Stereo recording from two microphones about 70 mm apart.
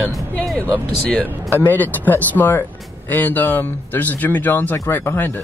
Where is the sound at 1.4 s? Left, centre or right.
Left.